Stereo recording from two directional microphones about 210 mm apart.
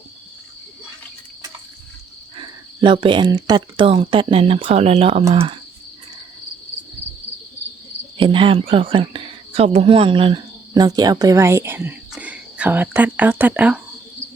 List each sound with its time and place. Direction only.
2.3 s speech: 20° right (ahead or behind)
8.2 s speech: 25° right (ahead or behind); by 13.8 s 5° right (ahead or behind)